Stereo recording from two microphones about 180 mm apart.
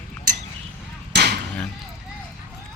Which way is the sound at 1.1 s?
70° right (ahead or behind).